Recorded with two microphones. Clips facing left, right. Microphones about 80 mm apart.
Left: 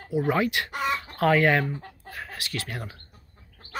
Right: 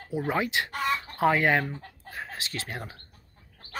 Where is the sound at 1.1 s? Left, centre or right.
Centre.